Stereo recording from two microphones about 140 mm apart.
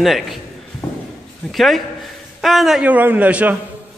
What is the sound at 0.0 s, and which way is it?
Speech, centre (ahead or behind).